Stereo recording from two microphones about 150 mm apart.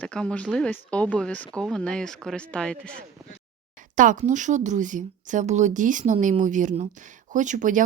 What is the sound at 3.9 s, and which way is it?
Speech, 60° right (ahead or behind).